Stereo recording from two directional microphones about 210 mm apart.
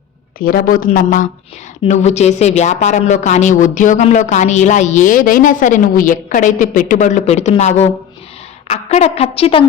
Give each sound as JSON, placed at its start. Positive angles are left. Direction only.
{"t": 0.3, "sound": "a woman's voice", "side_deg": 45}